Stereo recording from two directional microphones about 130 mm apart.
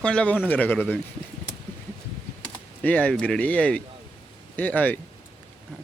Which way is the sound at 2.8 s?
10° left (ahead or behind).